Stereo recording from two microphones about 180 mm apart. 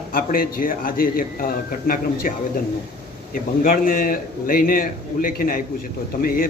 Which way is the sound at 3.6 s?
50° left (ahead or behind).